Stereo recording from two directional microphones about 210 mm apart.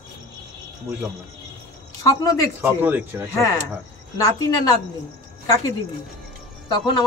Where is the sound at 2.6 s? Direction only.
10° right (ahead or behind).